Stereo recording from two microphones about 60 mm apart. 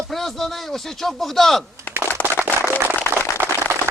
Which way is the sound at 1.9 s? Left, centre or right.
Left.